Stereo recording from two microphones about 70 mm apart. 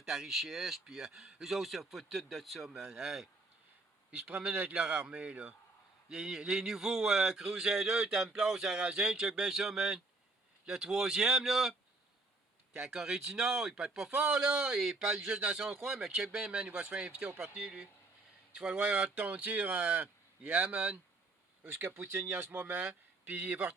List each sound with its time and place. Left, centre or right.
0.0 s speech: centre
4.3 s a man's voice: centre
12.8 s a man's voice: centre
14.1 s a man's voice: centre
20.6 s speech: centre
21.6 s speech: right
22.8 s speech: centre